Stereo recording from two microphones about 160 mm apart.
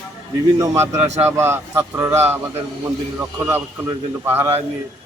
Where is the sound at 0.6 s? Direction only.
20° right (ahead or behind).